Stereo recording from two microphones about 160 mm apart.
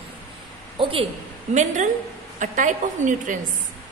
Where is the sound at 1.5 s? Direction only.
50° right (ahead or behind).